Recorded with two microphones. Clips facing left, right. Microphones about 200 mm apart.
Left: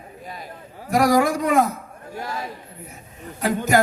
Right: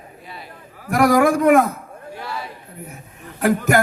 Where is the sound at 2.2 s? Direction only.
45° left (ahead or behind).